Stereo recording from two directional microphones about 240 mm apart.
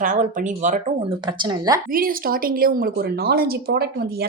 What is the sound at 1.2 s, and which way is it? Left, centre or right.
Speech, centre.